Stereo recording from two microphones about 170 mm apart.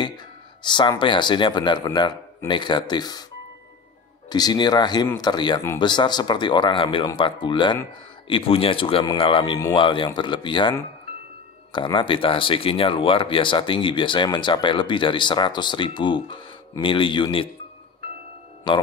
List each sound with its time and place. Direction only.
0.6 s speech: 25° left (ahead or behind)
4.3 s speech: 25° left (ahead or behind)
11.7 s speech: 30° left (ahead or behind)